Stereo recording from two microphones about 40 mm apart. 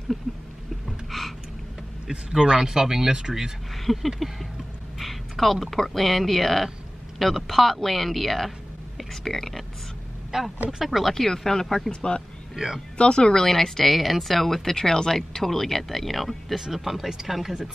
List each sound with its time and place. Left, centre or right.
0.8 s a sound: centre
2.0 s speech: centre
3.7 s speech: centre
10.3 s speech: centre
10.9 s speech: centre; by 12.2 s left
12.5 s speech: centre
12.9 s speech: left; by 17.6 s centre